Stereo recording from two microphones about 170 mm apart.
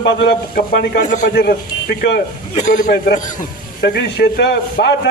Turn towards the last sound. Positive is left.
turn(degrees=75)  # may be behind; listen again after turning